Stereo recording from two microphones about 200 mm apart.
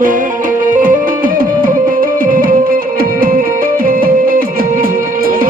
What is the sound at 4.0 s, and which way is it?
Music, 45° right (ahead or behind).